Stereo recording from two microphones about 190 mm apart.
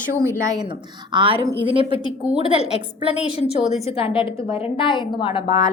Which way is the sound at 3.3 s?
30° left (ahead or behind).